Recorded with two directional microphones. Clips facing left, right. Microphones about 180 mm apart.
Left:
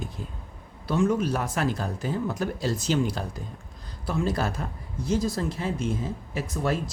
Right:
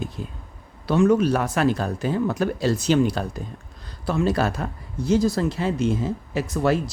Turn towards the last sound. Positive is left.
turn(degrees=-80)